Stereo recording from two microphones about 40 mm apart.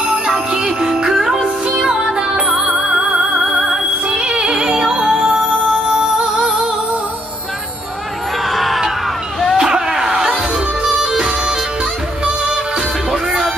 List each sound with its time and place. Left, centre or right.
0.5 s music: right
2.1 s music: right
2.5 s music: centre
4.2 s music: right
8.5 s music: centre
9.6 s a sound: centre
11.0 s bagpipes: centre
13.1 s music: centre